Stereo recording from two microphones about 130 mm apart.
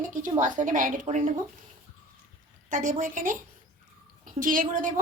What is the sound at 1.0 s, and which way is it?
Speech, 70° right (ahead or behind).